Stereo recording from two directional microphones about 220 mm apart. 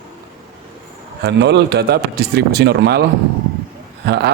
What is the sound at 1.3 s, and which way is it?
Speech, 50° right (ahead or behind).